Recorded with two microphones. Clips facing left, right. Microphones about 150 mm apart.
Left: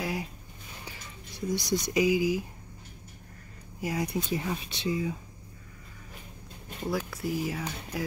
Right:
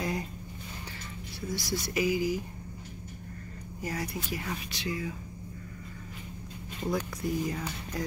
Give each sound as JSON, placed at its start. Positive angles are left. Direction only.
{"t": 0.0, "sound": "a sound", "side_deg": 5}
{"t": 1.5, "sound": "speech", "side_deg": 20}
{"t": 3.8, "sound": "speech", "side_deg": 15}
{"t": 6.9, "sound": "speech", "side_deg": 5}